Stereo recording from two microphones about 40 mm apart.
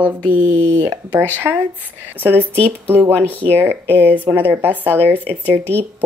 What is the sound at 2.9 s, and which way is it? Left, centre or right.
Speech, right.